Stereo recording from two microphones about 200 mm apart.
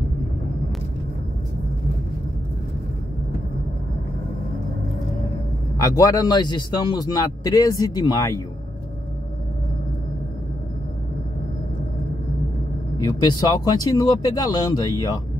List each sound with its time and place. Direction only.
5.8 s a man's voice: 15° left (ahead or behind)
13.0 s a man's voice: 20° left (ahead or behind)